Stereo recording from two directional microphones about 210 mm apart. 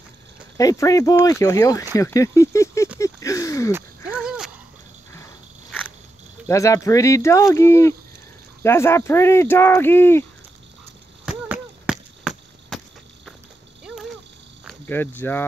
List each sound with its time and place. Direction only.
0.6 s speech: 15° left (ahead or behind)
3.7 s a sound: 5° right (ahead or behind)
6.4 s speech: 15° left (ahead or behind)
11.2 s chop: 5° right (ahead or behind)
13.8 s a sound: centre (ahead or behind)
14.9 s speech: 10° left (ahead or behind)